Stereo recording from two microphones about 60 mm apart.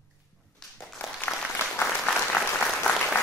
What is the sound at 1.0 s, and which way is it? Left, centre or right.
Applause, left.